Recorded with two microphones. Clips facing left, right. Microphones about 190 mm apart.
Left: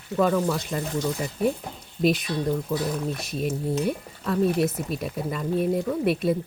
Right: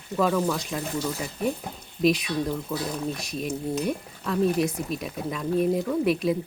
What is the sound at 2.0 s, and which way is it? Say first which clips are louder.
Speech: even; centre (ahead or behind).